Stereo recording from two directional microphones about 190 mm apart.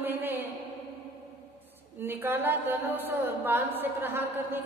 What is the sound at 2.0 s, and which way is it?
A woman's voice, 10° right (ahead or behind).